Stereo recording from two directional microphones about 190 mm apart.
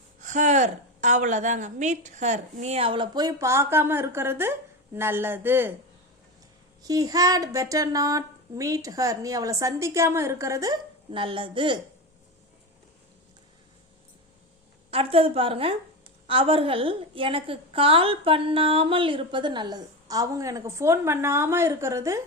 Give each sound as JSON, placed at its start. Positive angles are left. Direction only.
{"t": 0.2, "sound": "a woman's voice", "side_deg": -40}
{"t": 6.8, "sound": "speech", "side_deg": -20}
{"t": 14.8, "sound": "a woman's voice", "side_deg": -30}